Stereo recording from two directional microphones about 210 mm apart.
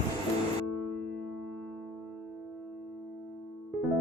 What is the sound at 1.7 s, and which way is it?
Music, centre (ahead or behind).